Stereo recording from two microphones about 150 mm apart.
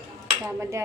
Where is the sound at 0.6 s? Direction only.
20° right (ahead or behind).